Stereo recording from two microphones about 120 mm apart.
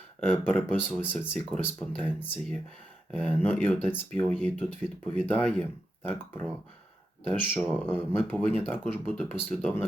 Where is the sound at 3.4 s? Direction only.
15° left (ahead or behind).